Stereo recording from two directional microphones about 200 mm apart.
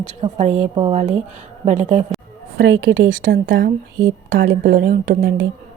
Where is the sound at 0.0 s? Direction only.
35° right (ahead or behind).